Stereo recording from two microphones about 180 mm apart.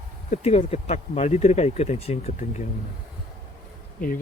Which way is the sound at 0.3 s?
35° left (ahead or behind).